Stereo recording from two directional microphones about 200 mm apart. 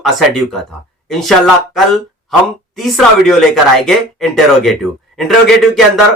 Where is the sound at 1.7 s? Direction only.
Centre (ahead or behind).